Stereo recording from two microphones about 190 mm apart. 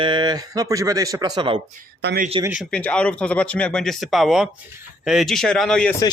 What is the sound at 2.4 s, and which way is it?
Speech, 5° right (ahead or behind).